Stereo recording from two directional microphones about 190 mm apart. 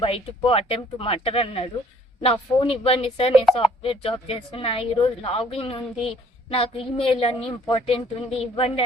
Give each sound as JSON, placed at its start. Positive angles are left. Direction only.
{"t": 0.0, "sound": "a woman's voice", "side_deg": 30}